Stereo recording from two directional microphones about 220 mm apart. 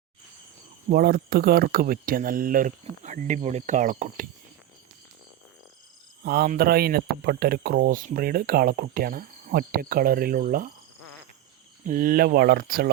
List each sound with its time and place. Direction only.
0.9 s speech: 45° right (ahead or behind)
6.2 s speech: 45° right (ahead or behind)
11.9 s speech: 40° right (ahead or behind)